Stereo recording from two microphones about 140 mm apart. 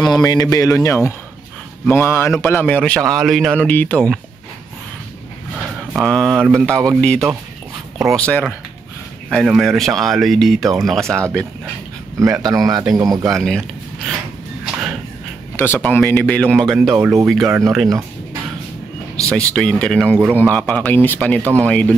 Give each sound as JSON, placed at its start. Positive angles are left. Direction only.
{"t": 0.0, "sound": "a man's voice", "side_deg": 30}
{"t": 6.0, "sound": "a man's voice", "side_deg": 5}
{"t": 12.2, "sound": "speech", "side_deg": -25}
{"t": 13.3, "sound": "speech", "side_deg": 5}
{"t": 14.6, "sound": "whip", "side_deg": -5}
{"t": 15.5, "sound": "a man's voice", "side_deg": 15}
{"t": 17.0, "sound": "speech", "side_deg": -15}
{"t": 19.2, "sound": "a man's voice", "side_deg": 5}